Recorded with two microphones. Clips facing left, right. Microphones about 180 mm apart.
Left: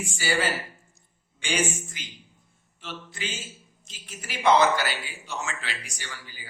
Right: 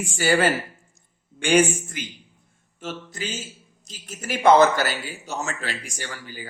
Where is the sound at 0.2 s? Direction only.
55° right (ahead or behind).